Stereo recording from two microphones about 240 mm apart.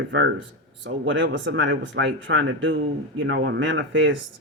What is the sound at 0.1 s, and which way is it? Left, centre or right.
Speech, right.